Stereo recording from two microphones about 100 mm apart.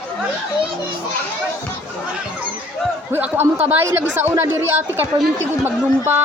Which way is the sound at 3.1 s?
20° right (ahead or behind).